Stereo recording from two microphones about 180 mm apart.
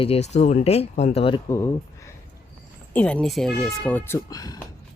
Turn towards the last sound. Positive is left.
turn(degrees=20)  # may be behind; listen again after turning